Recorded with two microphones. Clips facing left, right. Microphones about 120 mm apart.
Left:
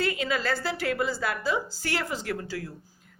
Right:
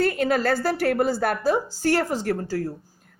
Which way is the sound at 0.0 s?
50° right (ahead or behind).